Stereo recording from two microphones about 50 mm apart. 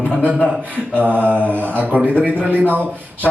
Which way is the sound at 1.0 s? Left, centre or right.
Right.